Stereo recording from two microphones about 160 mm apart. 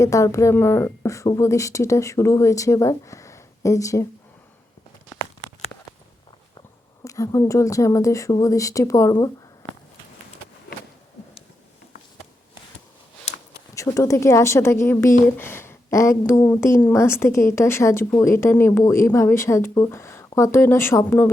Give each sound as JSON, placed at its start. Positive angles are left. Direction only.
{"t": 0.0, "sound": "speech", "side_deg": 20}
{"t": 7.0, "sound": "speech", "side_deg": 20}
{"t": 13.7, "sound": "a woman's voice", "side_deg": 20}